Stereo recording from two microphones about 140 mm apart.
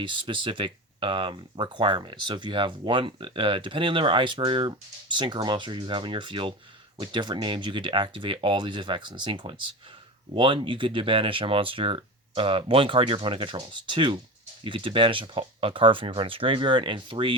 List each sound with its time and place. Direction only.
0.0 s speech: 35° right (ahead or behind)